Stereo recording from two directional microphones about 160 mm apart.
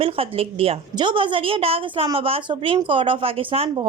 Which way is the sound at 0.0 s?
35° right (ahead or behind).